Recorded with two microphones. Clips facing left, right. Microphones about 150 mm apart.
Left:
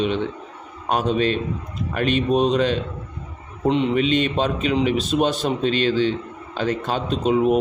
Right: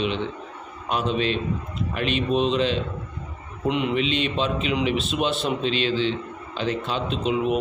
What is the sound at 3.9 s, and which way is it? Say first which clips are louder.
A man's voice: left 4 dB; 45° left (ahead or behind).